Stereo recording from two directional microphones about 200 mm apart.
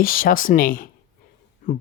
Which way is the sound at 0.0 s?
45° left (ahead or behind).